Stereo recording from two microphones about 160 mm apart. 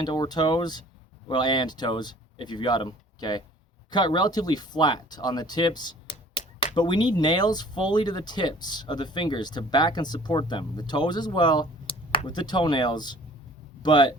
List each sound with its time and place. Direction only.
0.0 s speech: 25° left (ahead or behind)